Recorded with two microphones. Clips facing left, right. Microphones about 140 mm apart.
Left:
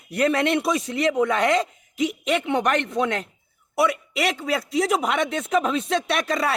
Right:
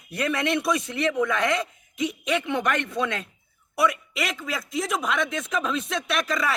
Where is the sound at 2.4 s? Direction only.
20° left (ahead or behind).